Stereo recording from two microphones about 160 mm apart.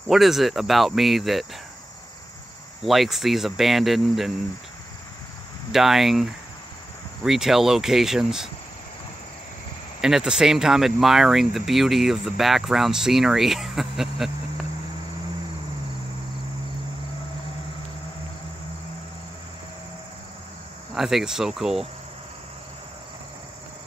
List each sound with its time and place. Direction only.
0.1 s speech: centre (ahead or behind)
2.8 s speech: centre (ahead or behind)
5.7 s speech: centre (ahead or behind)
7.2 s speech: centre (ahead or behind)
10.0 s speech: 5° right (ahead or behind)
20.9 s speech: centre (ahead or behind)